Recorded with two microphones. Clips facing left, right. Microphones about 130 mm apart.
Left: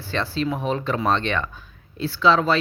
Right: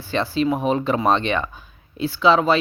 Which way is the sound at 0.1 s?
15° right (ahead or behind).